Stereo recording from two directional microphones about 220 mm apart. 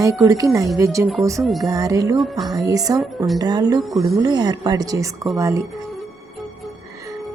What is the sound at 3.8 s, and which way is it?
Speech, centre (ahead or behind).